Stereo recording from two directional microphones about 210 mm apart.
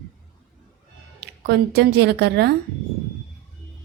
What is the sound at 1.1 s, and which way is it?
Speech, 50° right (ahead or behind).